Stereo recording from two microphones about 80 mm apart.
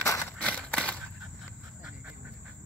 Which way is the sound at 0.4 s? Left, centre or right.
Centre.